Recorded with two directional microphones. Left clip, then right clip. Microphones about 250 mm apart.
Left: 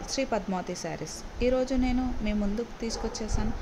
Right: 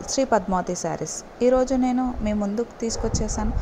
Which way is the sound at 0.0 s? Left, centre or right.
Centre.